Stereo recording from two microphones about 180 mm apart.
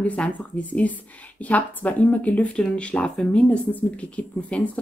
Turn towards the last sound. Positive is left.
turn(degrees=5)  # may be behind; listen again after turning